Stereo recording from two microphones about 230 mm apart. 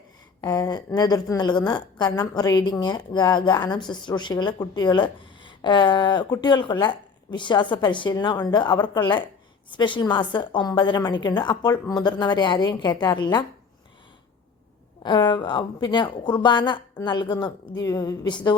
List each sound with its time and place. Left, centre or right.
0.4 s a woman's voice: centre
15.0 s a woman's voice: centre